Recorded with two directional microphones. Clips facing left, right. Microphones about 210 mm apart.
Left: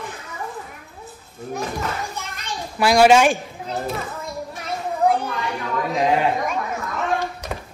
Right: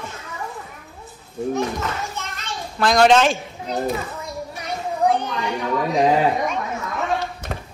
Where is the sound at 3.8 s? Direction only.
Centre (ahead or behind).